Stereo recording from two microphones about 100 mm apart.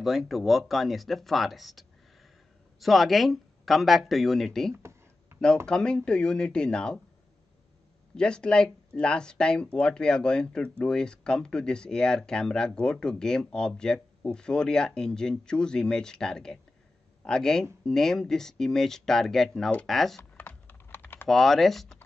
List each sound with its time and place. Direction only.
0.0 s speech: centre (ahead or behind)
5.3 s a sound: 25° right (ahead or behind)
5.7 s speech: 10° left (ahead or behind)
8.2 s speech: 10° left (ahead or behind)
20.3 s typing: 20° left (ahead or behind)
21.3 s speech: centre (ahead or behind)